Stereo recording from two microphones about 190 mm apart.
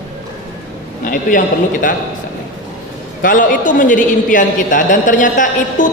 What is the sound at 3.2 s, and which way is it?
A woman's voice, 45° left (ahead or behind).